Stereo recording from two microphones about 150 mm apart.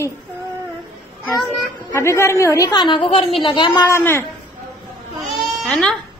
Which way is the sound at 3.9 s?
15° left (ahead or behind).